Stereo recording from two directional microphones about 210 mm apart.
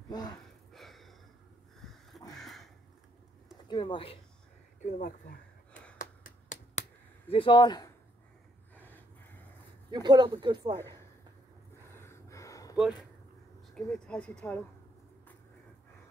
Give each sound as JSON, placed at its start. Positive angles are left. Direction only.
{"t": 0.7, "sound": "a sound", "side_deg": 0}
{"t": 2.3, "sound": "crow", "side_deg": 0}
{"t": 3.6, "sound": "speech", "side_deg": 25}
{"t": 4.8, "sound": "speech", "side_deg": 35}
{"t": 5.7, "sound": "gasp", "side_deg": 5}
{"t": 5.9, "sound": "finger snapping", "side_deg": 40}
{"t": 7.2, "sound": "speech", "side_deg": 25}
{"t": 8.7, "sound": "gasp", "side_deg": 10}
{"t": 9.8, "sound": "speech", "side_deg": -20}
{"t": 11.9, "sound": "gasp", "side_deg": 10}
{"t": 13.7, "sound": "speech", "side_deg": 5}